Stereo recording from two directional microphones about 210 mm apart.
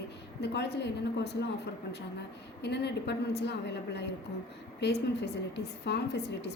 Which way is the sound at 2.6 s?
55° left (ahead or behind).